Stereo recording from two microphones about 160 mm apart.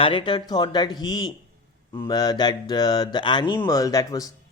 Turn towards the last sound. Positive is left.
turn(degrees=20)  # may be behind; listen again after turning